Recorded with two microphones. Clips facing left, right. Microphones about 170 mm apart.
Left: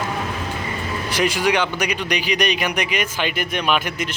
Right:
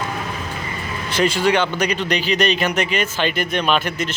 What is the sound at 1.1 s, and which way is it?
Speech, 15° left (ahead or behind).